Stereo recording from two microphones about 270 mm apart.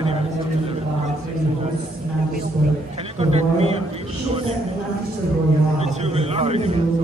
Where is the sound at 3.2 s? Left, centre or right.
Right.